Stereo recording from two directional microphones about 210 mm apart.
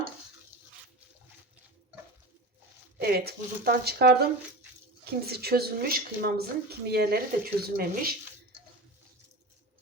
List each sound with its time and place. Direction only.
3.0 s speech: 45° right (ahead or behind)